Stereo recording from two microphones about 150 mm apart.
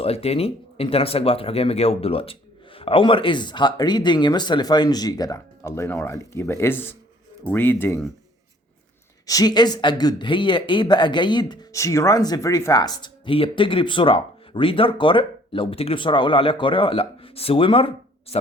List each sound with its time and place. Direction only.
0.0 s speech: 40° left (ahead or behind); by 8.0 s 15° left (ahead or behind)
9.2 s speech: 25° left (ahead or behind)